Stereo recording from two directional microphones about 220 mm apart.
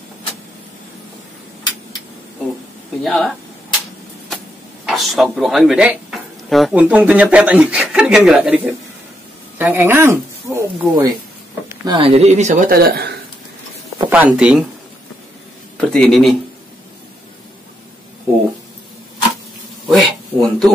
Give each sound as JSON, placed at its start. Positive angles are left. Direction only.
{"t": 3.0, "sound": "speech", "side_deg": 0}
{"t": 4.8, "sound": "speech", "side_deg": 0}
{"t": 13.9, "sound": "speech", "side_deg": -10}
{"t": 15.8, "sound": "speech", "side_deg": 5}
{"t": 19.9, "sound": "a sound", "side_deg": 0}